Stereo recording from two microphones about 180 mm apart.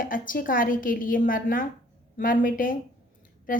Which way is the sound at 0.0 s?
50° left (ahead or behind).